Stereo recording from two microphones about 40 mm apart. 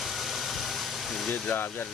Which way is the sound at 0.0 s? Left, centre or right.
Centre.